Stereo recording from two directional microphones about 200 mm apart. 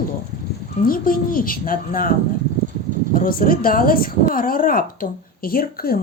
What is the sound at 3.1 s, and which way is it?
Speech, 45° left (ahead or behind).